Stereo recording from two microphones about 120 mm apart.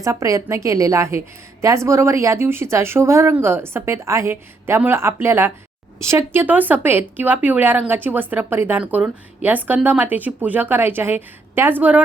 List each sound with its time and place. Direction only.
0.0 s speech: 25° right (ahead or behind)